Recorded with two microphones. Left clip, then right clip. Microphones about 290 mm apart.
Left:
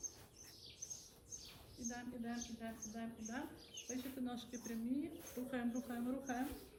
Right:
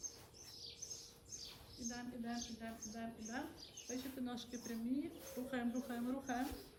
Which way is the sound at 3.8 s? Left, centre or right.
Centre.